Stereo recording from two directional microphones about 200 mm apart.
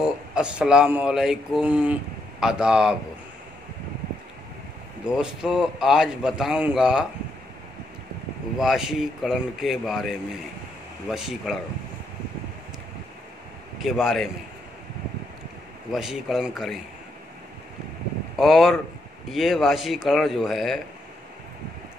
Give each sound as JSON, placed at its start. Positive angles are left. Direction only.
{"t": 0.0, "sound": "a man's voice", "side_deg": -5}
{"t": 5.0, "sound": "a man's voice", "side_deg": -5}
{"t": 8.5, "sound": "a man's voice", "side_deg": 0}
{"t": 13.8, "sound": "a man's voice", "side_deg": 0}
{"t": 15.9, "sound": "a man's voice", "side_deg": 0}
{"t": 18.4, "sound": "a man's voice", "side_deg": 0}